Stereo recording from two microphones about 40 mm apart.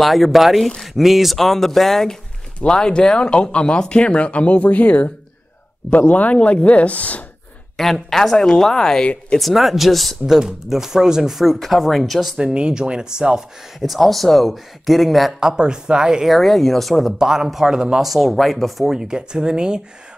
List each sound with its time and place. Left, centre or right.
0.0 s speech: centre
2.6 s speech: left
7.7 s speech: centre
9.0 s speech: left
9.4 s speech: centre
10.2 s speech: centre
12.4 s speech: right
13.7 s speech: centre
15.4 s speech: centre
16.3 s speech: centre
17.2 s speech: centre
18.0 s speech: centre
18.9 s speech: centre